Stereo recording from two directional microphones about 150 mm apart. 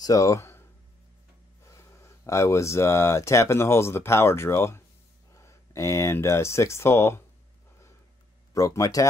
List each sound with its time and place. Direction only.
0.0 s speech: 20° left (ahead or behind)
8.5 s speech: 20° left (ahead or behind)